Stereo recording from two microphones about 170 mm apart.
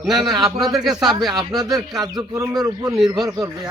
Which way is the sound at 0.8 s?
Centre (ahead or behind).